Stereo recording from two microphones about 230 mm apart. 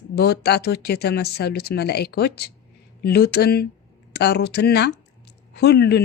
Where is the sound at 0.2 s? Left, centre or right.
Left.